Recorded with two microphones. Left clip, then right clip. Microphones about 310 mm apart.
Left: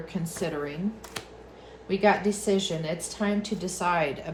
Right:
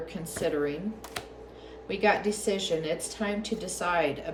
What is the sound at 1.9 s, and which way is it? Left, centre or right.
A woman's voice, centre.